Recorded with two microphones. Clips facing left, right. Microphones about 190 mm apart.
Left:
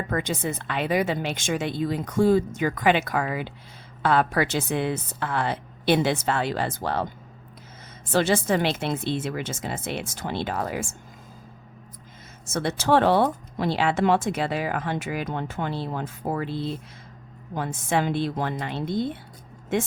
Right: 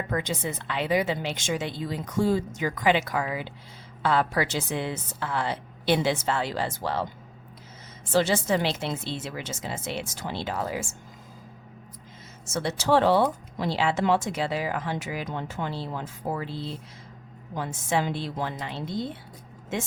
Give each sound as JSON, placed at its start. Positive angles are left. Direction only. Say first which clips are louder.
{"t": 0.1, "sound": "speech", "louder": "left 2 dB", "side_deg": 50}
{"t": 8.1, "sound": "speech", "louder": "left 1 dB", "side_deg": 55}
{"t": 12.5, "sound": "speech", "louder": "left 2 dB", "side_deg": 55}